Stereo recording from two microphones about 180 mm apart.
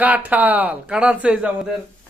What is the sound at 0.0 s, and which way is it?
Speech, 10° right (ahead or behind).